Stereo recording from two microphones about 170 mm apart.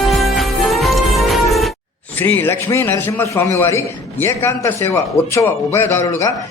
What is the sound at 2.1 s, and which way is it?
A man's voice, 10° left (ahead or behind).